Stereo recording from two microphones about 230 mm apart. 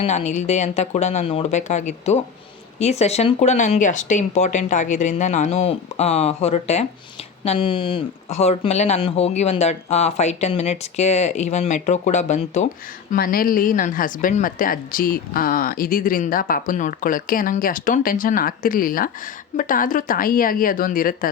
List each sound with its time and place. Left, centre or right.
0.0 s a woman's voice: left